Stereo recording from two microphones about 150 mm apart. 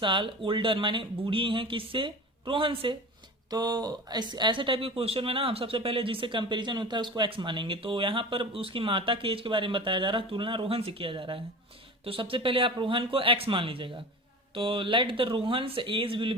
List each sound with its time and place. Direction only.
0.0 s speech: 35° right (ahead or behind)